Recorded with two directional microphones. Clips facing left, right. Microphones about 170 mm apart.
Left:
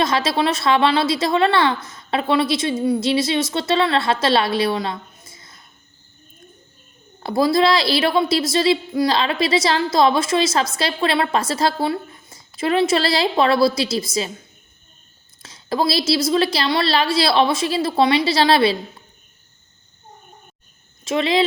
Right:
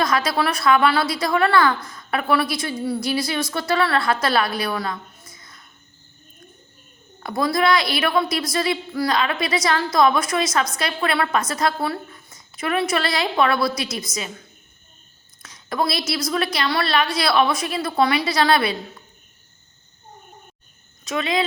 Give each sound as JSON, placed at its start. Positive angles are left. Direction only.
{"t": 0.0, "sound": "a woman's voice", "side_deg": 25}
{"t": 7.2, "sound": "a woman's voice", "side_deg": 30}
{"t": 15.4, "sound": "a woman's voice", "side_deg": 30}
{"t": 21.0, "sound": "speech", "side_deg": 30}